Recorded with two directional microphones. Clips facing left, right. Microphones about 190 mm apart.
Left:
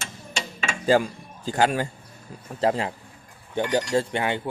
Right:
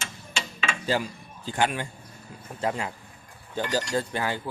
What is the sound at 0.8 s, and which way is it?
A man's voice, 45° left (ahead or behind).